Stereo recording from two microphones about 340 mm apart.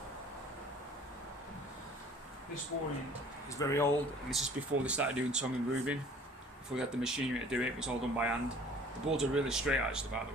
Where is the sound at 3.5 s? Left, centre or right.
Centre.